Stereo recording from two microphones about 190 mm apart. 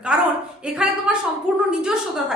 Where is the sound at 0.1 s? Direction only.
5° right (ahead or behind).